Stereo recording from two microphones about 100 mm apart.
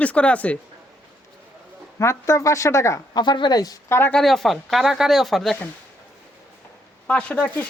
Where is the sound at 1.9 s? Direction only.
30° left (ahead or behind).